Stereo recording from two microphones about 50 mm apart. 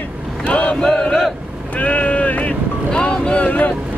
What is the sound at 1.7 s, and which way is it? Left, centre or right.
Boat, left.